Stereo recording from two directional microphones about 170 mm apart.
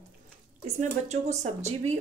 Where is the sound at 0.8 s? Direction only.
40° right (ahead or behind).